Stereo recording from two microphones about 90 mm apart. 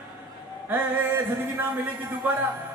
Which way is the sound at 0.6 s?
20° right (ahead or behind).